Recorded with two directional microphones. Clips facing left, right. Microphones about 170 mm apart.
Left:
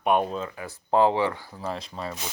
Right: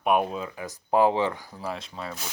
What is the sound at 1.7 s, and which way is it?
Speech, centre (ahead or behind).